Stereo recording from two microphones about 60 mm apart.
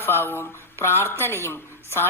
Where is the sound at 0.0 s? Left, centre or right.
Left.